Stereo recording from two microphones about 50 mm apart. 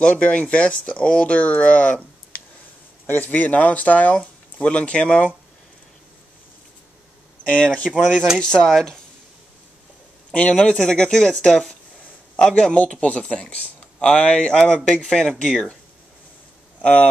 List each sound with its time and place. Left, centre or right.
0.0 s speech: left
3.1 s speech: left
7.4 s speech: centre
10.3 s speech: left
16.8 s speech: left